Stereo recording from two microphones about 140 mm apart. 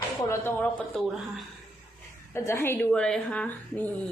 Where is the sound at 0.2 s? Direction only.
15° left (ahead or behind).